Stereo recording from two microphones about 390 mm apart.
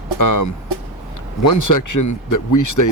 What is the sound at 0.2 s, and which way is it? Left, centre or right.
Speech, left.